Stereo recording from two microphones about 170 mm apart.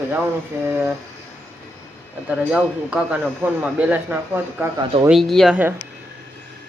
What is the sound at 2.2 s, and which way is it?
Speech, 5° right (ahead or behind).